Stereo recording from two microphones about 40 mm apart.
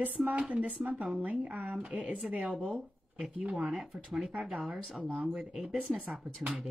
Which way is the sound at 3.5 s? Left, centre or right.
Right.